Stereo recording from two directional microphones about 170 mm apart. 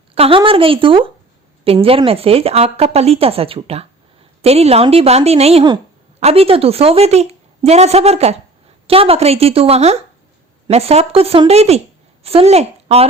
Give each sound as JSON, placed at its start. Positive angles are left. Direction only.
{"t": 0.1, "sound": "a woman's voice", "side_deg": -35}